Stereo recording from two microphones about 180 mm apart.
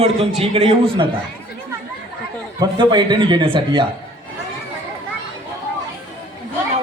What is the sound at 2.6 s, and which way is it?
A man's voice, 25° right (ahead or behind).